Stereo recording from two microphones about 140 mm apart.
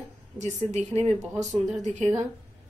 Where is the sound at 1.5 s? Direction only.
60° right (ahead or behind).